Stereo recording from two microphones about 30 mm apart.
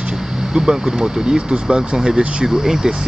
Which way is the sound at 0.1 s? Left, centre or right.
Right.